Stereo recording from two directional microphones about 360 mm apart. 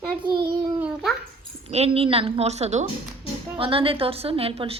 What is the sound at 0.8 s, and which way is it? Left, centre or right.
Speech, centre.